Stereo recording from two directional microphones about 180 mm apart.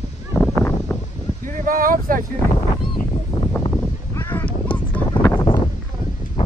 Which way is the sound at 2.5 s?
25° left (ahead or behind).